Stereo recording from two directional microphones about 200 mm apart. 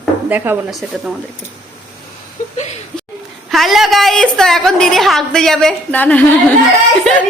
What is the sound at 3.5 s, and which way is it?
A woman's voice, centre (ahead or behind).